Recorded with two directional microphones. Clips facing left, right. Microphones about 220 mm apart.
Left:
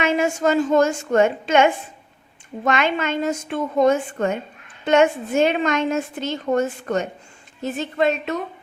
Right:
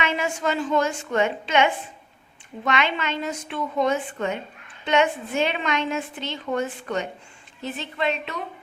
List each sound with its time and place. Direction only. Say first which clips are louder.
0.0 s a woman's voice: left 6 dB; 45° left (ahead or behind)